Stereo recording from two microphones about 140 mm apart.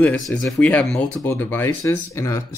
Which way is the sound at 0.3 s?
10° left (ahead or behind).